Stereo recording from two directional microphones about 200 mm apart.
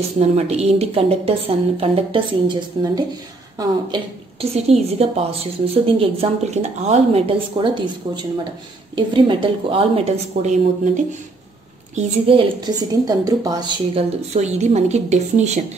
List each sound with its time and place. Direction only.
0.2 s a woman's voice: 30° right (ahead or behind)
11.9 s a woman's voice: 25° right (ahead or behind)
14.3 s a woman's voice: 35° right (ahead or behind)